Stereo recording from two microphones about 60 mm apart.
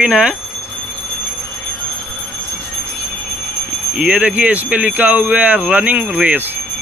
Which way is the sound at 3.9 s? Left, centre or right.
Centre.